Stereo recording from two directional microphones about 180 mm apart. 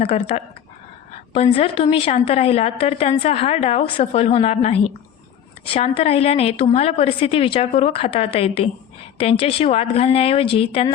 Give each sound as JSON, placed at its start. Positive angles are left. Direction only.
{"t": 0.0, "sound": "a woman's voice", "side_deg": 35}